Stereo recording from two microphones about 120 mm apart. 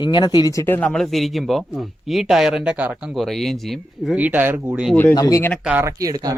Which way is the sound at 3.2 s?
Centre (ahead or behind).